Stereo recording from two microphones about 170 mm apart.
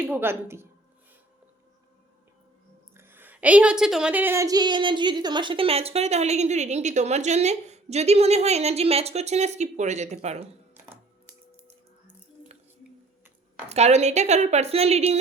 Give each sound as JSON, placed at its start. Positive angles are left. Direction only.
{"t": 0.0, "sound": "a woman's voice", "side_deg": -15}
{"t": 2.9, "sound": "a woman's voice", "side_deg": -15}
{"t": 13.7, "sound": "a woman's voice", "side_deg": -40}